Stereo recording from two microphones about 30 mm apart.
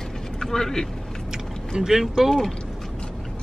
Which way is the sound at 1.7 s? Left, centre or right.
Centre.